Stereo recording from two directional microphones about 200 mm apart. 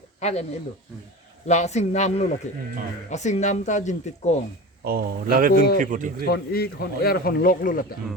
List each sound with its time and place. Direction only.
0.2 s speech: 35° left (ahead or behind)
1.5 s speech: 35° left (ahead or behind)
4.8 s speech: 50° right (ahead or behind)
6.2 s speech: 50° left (ahead or behind)